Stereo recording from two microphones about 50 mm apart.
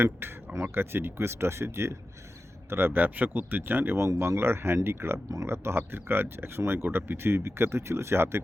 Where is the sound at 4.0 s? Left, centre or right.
Right.